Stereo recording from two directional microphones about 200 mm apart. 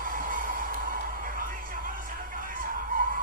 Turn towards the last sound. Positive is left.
turn(degrees=-45)  # may be behind; listen again after turning